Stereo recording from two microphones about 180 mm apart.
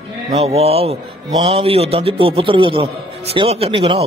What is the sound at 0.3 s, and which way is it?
A man's voice, 35° right (ahead or behind).